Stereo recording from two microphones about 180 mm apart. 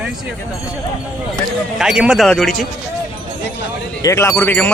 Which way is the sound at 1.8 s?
5° right (ahead or behind).